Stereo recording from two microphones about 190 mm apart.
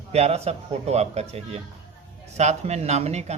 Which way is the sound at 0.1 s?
35° right (ahead or behind).